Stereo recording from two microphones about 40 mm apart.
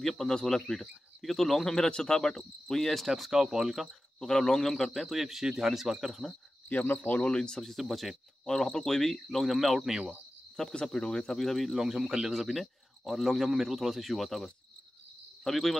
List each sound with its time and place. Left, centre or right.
0.2 s speech: centre
0.7 s speech: centre
1.9 s speech: left
3.1 s speech: centre
4.2 s speech: centre
6.7 s speech: left
7.3 s speech: centre
7.6 s speech: centre
8.5 s speech: centre
11.1 s speech: left
11.3 s speech: centre